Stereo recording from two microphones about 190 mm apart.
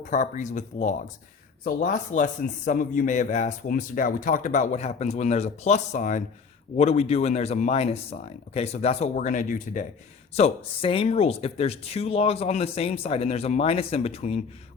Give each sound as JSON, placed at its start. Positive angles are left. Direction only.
{"t": 0.1, "sound": "a man's voice", "side_deg": 40}